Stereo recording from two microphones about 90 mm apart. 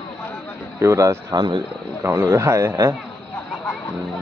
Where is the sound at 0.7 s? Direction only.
35° right (ahead or behind).